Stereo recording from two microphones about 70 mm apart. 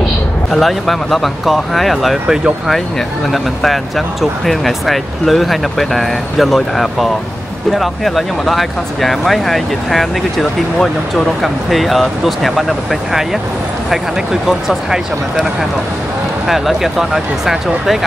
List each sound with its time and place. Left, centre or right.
0.5 s speech: centre
3.3 s speech: centre
16.4 s speech: centre